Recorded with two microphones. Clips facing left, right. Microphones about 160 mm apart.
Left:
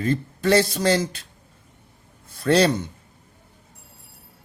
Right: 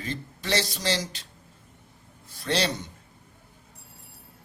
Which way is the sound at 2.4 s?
50° left (ahead or behind).